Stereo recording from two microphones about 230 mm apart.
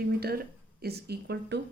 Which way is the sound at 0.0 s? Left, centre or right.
Right.